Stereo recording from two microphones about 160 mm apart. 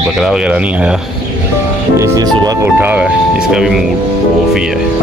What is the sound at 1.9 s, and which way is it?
Music, 20° right (ahead or behind).